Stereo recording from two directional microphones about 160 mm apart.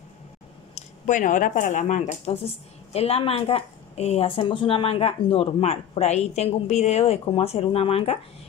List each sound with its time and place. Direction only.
0.7 s speech: 50° left (ahead or behind)